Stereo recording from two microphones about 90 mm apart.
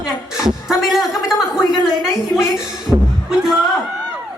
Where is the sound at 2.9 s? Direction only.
20° right (ahead or behind).